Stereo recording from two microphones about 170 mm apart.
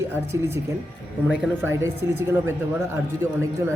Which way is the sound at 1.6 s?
15° right (ahead or behind).